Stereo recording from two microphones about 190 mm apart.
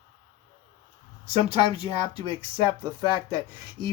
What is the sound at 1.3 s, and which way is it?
Speech, 35° right (ahead or behind).